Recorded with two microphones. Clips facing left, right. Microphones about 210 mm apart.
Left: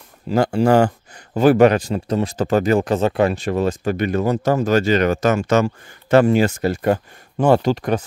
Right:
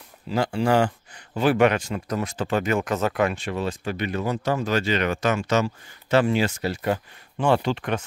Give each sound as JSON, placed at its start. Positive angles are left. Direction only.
{"t": 0.3, "sound": "speech", "side_deg": 45}
{"t": 2.3, "sound": "speech", "side_deg": 40}